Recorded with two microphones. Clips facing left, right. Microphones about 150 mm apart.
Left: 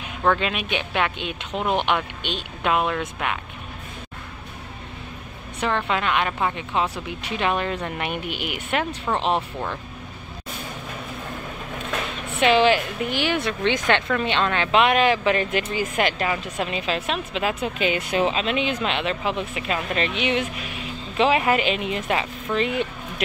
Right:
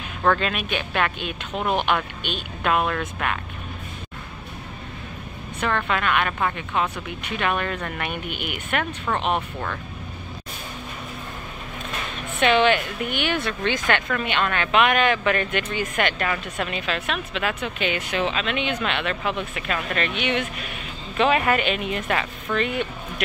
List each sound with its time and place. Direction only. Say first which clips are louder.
0.2 s speech: even; 10° left (ahead or behind)
5.6 s a woman's voice: left 1 dB; 20° left (ahead or behind)
8.3 s speech: left 1 dB; 90° left
8.6 s a woman's voice: left 1 dB; 25° left (ahead or behind)
12.4 s a woman's voice: left 1 dB; 30° left (ahead or behind)